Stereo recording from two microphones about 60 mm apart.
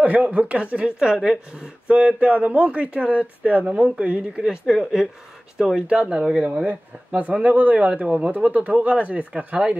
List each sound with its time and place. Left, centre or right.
0.0 s speech: right; by 5.0 s centre
5.8 s speech: centre
6.6 s speech: right